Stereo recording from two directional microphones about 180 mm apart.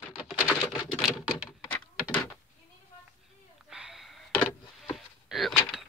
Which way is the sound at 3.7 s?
5° right (ahead or behind).